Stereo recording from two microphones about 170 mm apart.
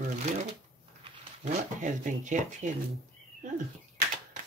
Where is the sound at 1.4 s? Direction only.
45° right (ahead or behind).